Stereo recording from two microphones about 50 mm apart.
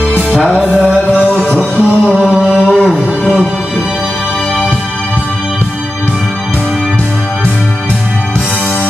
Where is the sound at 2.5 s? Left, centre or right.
Centre.